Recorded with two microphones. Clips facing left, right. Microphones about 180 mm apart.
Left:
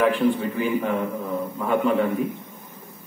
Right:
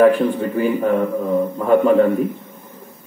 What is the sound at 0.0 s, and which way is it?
A man's voice, 45° right (ahead or behind).